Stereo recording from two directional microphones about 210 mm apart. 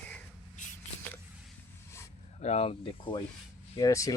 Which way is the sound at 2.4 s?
30° left (ahead or behind).